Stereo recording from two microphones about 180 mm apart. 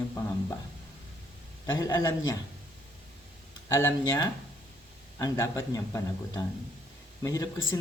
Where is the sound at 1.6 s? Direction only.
20° left (ahead or behind).